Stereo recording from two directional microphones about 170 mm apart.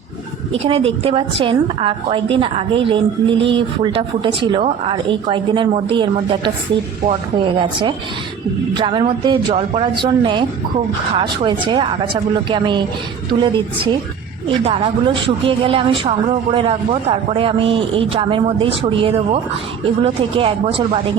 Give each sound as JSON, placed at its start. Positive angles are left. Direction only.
{"t": 0.5, "sound": "a woman's voice", "side_deg": -35}
{"t": 14.4, "sound": "a woman's voice", "side_deg": -30}